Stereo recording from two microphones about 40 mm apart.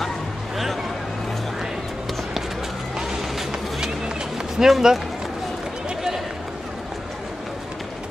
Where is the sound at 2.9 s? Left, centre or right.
Centre.